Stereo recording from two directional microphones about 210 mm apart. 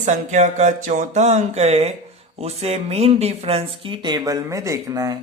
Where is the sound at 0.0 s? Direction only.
35° right (ahead or behind).